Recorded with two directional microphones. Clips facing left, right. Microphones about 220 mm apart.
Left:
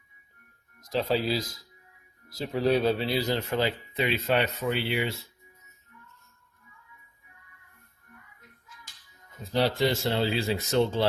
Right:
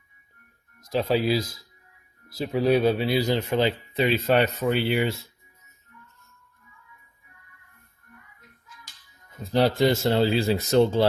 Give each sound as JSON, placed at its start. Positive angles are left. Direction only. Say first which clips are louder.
{"t": 0.8, "sound": "speech", "louder": "right 3 dB", "side_deg": -10}
{"t": 3.9, "sound": "speech", "louder": "right 5 dB", "side_deg": -40}
{"t": 9.5, "sound": "speech", "louder": "right 5 dB", "side_deg": -45}